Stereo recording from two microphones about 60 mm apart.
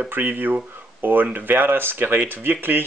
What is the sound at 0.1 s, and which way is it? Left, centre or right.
A man's voice, right.